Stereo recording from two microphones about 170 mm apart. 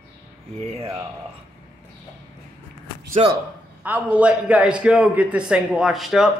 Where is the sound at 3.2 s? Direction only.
35° right (ahead or behind).